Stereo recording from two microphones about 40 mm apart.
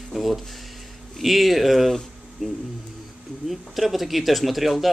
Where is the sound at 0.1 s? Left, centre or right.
Centre.